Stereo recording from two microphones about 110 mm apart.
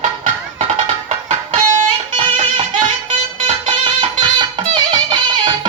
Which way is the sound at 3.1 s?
50° right (ahead or behind).